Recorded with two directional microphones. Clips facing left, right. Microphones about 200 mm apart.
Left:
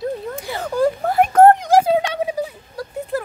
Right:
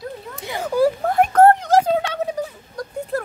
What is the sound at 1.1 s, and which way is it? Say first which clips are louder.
Speech: left 1 dB; 5° left (ahead or behind).